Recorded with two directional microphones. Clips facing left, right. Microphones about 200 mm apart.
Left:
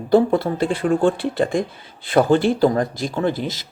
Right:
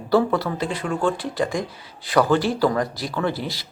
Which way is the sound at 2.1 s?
25° left (ahead or behind).